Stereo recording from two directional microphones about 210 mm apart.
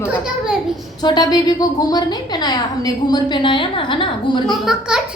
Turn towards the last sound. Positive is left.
turn(degrees=0)  # may be behind; listen again after turning